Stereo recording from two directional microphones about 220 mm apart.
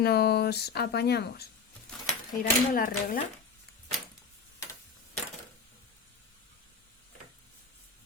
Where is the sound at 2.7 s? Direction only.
40° left (ahead or behind).